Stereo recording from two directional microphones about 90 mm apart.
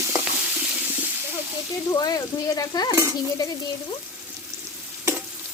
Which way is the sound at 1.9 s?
50° left (ahead or behind).